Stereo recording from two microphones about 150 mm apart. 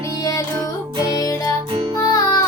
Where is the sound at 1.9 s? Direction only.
25° left (ahead or behind).